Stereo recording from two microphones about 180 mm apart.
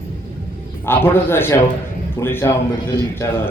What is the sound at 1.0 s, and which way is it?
A man's voice, 10° left (ahead or behind).